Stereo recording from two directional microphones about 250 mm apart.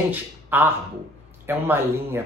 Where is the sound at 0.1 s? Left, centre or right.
Centre.